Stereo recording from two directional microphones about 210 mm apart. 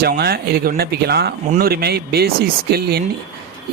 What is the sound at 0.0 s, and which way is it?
Speech, 45° right (ahead or behind).